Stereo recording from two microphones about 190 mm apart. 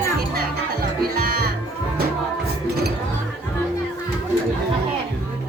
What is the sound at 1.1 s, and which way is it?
Speech, 50° right (ahead or behind).